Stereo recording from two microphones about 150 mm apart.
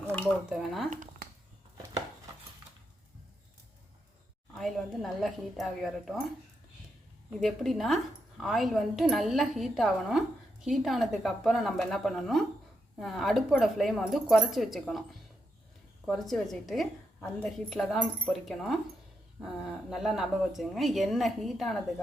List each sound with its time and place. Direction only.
0.5 s a woman's voice: centre (ahead or behind)
0.9 s a sound: 60° right (ahead or behind)
4.5 s a woman's voice: centre (ahead or behind)
7.3 s a woman's voice: centre (ahead or behind)
16.0 s a woman's voice: centre (ahead or behind)